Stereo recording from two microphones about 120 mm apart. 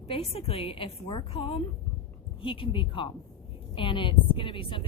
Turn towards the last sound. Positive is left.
turn(degrees=45)  # may be behind; listen again after turning